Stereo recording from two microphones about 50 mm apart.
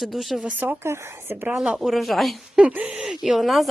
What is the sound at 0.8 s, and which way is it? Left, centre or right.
Speech, right.